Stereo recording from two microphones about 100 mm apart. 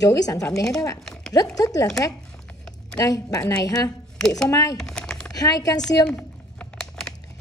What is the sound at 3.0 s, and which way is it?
A woman's voice, 35° left (ahead or behind).